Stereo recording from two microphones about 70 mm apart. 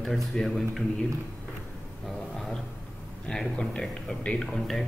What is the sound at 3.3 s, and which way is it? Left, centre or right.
Speech, centre.